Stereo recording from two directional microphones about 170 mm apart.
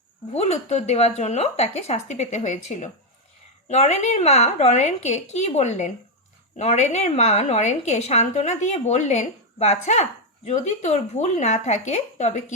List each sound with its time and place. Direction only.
0.3 s a woman's voice: 40° left (ahead or behind)